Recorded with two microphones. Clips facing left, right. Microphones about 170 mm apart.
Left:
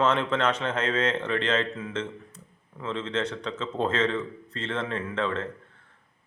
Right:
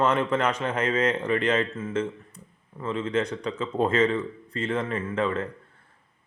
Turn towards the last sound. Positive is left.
turn(degrees=-10)  # may be behind; listen again after turning